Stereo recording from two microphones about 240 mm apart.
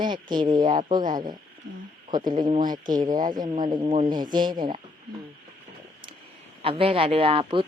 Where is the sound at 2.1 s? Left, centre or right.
Centre.